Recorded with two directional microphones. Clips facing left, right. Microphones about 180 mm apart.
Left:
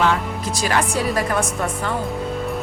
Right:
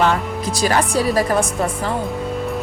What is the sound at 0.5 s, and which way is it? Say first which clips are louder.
Speech: right 3 dB; 35° right (ahead or behind).